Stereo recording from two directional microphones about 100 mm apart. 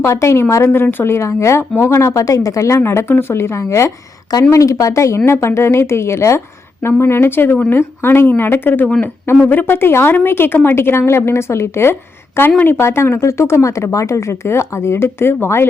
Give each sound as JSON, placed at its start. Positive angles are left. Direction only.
{"t": 0.0, "sound": "speech", "side_deg": 30}